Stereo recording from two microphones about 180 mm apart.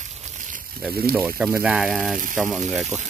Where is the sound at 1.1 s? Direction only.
5° right (ahead or behind).